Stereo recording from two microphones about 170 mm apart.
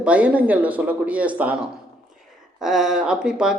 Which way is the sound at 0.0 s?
10° right (ahead or behind).